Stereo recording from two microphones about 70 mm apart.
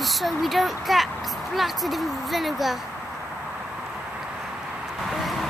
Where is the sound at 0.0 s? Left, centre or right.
Centre.